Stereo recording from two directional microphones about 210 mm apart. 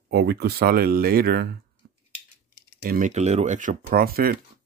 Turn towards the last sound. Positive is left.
turn(degrees=-45)  # may be behind; listen again after turning